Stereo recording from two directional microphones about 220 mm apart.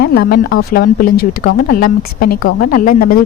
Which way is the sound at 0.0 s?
45° left (ahead or behind).